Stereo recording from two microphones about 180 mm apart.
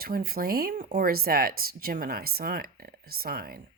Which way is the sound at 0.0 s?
55° right (ahead or behind).